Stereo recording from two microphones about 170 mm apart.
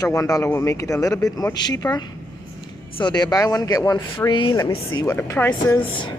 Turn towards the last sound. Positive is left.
turn(degrees=10)  # may be behind; listen again after turning